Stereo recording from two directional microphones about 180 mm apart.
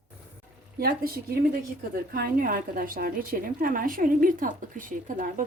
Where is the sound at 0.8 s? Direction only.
55° right (ahead or behind).